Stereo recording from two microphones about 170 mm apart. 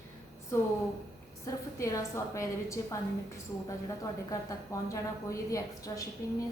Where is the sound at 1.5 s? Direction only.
20° left (ahead or behind).